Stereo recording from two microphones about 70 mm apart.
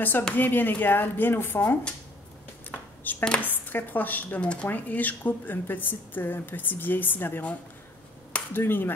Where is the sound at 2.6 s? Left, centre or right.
Left.